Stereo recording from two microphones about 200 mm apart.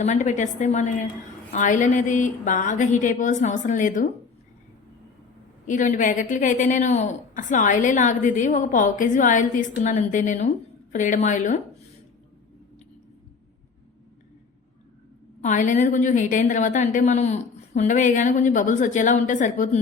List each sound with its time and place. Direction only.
0.0 s a woman's voice: 35° left (ahead or behind)
5.6 s a woman's voice: 40° left (ahead or behind)
15.4 s a woman's voice: 40° left (ahead or behind)